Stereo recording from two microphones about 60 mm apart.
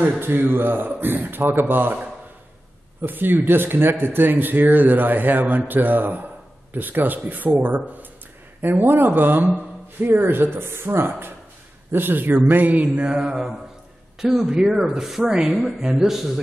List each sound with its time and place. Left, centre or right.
0.2 s speech: right
3.0 s speech: right
13.2 s speech: centre